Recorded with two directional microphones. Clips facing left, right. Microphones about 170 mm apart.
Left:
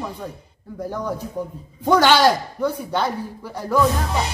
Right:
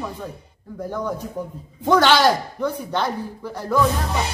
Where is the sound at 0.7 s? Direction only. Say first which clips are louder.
Even; 10° left (ahead or behind).